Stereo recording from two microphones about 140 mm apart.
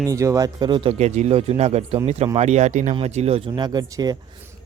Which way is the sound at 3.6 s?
30° right (ahead or behind).